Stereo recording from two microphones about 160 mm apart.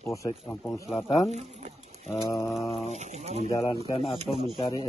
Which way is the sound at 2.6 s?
40° left (ahead or behind).